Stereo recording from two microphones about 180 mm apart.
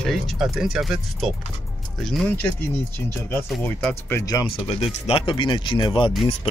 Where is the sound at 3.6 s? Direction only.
10° left (ahead or behind).